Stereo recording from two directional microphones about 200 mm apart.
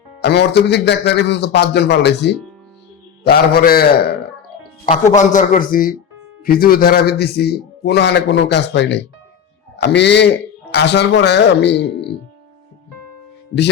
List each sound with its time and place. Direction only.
0.2 s a man's voice: 55° left (ahead or behind)
4.9 s a man's voice: 35° left (ahead or behind); by 12.1 s 60° left (ahead or behind)